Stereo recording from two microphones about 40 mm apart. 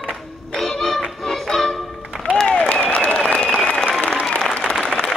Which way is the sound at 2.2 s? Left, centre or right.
Left.